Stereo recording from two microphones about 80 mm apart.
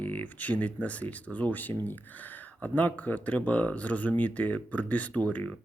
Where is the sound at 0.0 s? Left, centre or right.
Left.